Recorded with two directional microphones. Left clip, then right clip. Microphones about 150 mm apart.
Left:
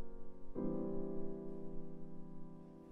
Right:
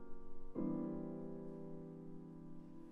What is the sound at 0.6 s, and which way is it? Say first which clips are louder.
Music: left 1 dB; 25° right (ahead or behind).